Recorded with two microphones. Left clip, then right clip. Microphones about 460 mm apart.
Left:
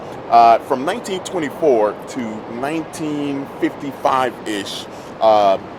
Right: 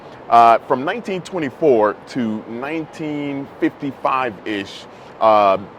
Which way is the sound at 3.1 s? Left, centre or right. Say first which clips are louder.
Left 2 dB; right.